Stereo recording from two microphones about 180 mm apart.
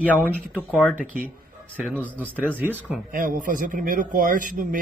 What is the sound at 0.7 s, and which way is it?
Speech, 5° right (ahead or behind).